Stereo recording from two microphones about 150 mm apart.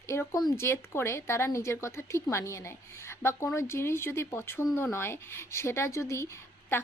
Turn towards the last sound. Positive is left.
turn(degrees=15)  # may be behind; listen again after turning